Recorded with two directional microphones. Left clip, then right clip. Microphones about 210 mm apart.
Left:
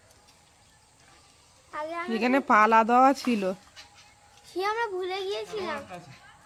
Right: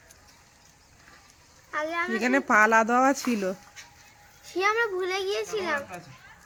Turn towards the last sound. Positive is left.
turn(degrees=-45)  # may be behind; listen again after turning